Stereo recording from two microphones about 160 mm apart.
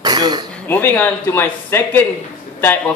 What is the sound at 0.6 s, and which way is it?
Speech, 10° left (ahead or behind).